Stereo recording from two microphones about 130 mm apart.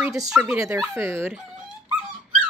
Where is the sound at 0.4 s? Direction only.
10° right (ahead or behind).